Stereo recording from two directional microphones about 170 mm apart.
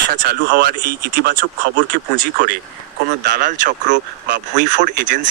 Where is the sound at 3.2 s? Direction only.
50° right (ahead or behind).